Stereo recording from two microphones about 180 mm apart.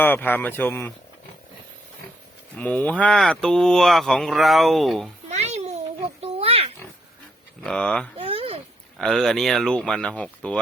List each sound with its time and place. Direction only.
0.0 s a man's voice: 10° left (ahead or behind)
2.6 s speech: 10° left (ahead or behind)
5.3 s a sound: 40° right (ahead or behind)
6.2 s pig: 35° right (ahead or behind)
7.6 s speech: 5° left (ahead or behind)
8.2 s a sound: 30° right (ahead or behind)
9.0 s speech: centre (ahead or behind)